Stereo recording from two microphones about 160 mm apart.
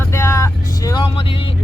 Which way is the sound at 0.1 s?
15° left (ahead or behind).